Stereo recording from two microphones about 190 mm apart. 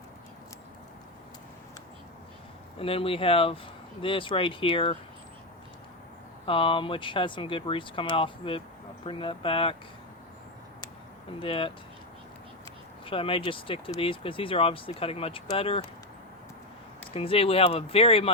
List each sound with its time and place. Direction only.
2.7 s speech: 30° left (ahead or behind)
6.4 s speech: 25° left (ahead or behind)
11.4 s speech: 25° left (ahead or behind)
13.1 s speech: 30° left (ahead or behind)
17.2 s speech: 30° left (ahead or behind)